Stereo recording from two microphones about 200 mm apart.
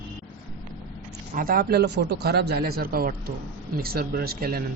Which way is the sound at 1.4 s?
45° right (ahead or behind).